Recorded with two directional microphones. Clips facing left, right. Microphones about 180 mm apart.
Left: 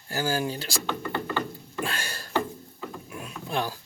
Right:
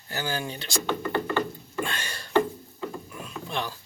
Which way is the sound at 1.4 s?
5° left (ahead or behind).